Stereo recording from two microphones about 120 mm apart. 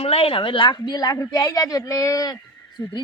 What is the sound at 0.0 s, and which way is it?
Speech, 55° left (ahead or behind).